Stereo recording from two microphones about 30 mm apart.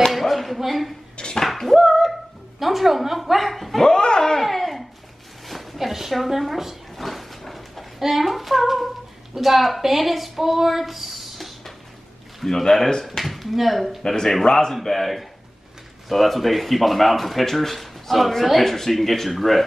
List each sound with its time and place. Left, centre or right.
0.1 s a sound: centre
0.6 s speech: centre
1.8 s a sound: centre
2.6 s speech: centre
3.8 s speech: left
4.4 s a woman's voice: centre
7.0 s a sound: centre
8.0 s speech: centre
12.4 s speech: centre
13.2 s speech: centre
14.2 s speech: centre
14.7 s speech: centre